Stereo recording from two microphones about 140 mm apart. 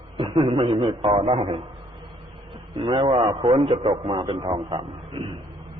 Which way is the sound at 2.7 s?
45° right (ahead or behind).